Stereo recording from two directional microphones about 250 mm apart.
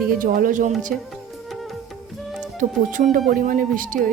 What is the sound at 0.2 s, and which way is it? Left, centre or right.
Speech, right.